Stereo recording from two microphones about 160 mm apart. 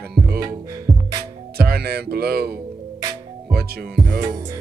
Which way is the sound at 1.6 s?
75° right (ahead or behind).